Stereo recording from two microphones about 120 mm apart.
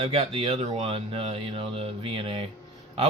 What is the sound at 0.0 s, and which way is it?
Speech, 55° right (ahead or behind).